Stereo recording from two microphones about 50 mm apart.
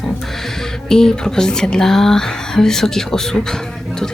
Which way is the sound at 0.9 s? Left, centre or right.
Centre.